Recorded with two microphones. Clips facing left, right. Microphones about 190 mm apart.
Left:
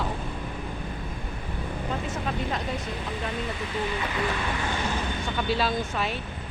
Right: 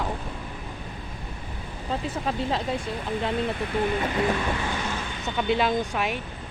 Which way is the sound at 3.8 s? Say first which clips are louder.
Right 5 dB; 50° right (ahead or behind).